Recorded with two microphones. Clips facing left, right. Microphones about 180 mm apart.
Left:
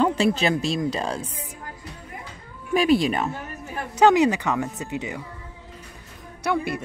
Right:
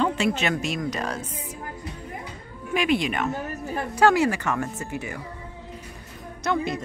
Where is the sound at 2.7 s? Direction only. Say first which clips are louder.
Left 4 dB; 35° left (ahead or behind).